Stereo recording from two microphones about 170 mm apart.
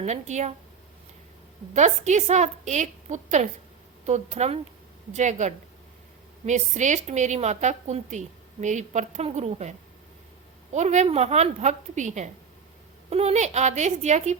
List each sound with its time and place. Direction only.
0.0 s a woman's voice: 45° right (ahead or behind)
1.7 s a woman's voice: 45° right (ahead or behind)